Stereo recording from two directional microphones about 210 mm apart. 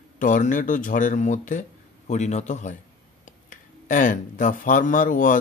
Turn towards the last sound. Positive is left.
turn(degrees=40)  # may be behind; listen again after turning